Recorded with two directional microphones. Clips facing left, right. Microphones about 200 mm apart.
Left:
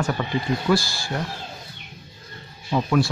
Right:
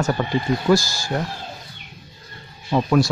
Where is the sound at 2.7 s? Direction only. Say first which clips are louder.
Right 3 dB; 45° right (ahead or behind).